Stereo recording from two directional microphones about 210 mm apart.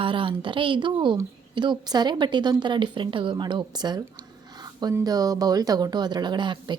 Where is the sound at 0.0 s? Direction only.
25° right (ahead or behind).